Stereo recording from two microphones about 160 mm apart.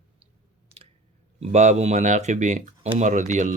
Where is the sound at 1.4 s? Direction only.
45° right (ahead or behind).